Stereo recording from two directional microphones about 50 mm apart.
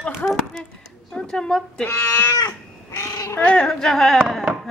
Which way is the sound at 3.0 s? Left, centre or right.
Left.